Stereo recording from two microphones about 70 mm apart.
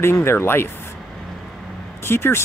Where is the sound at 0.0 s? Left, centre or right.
Left.